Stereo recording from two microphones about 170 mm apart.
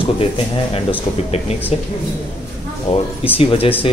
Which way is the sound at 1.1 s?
40° left (ahead or behind).